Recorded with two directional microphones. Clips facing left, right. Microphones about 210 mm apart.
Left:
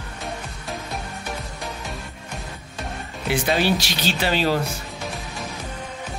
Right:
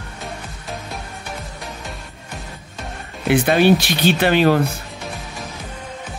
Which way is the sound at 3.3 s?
55° right (ahead or behind).